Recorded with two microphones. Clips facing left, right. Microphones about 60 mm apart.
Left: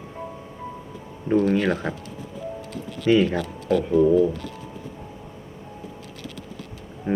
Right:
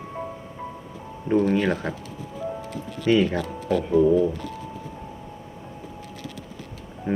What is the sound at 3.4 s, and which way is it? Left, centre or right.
Speech, centre.